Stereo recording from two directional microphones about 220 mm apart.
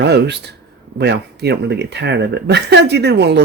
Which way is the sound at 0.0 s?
50° right (ahead or behind).